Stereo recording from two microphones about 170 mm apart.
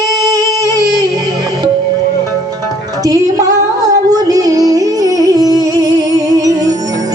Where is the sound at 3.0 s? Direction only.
20° right (ahead or behind).